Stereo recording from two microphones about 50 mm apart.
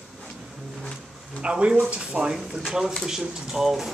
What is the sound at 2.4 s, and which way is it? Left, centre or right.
Speech, centre.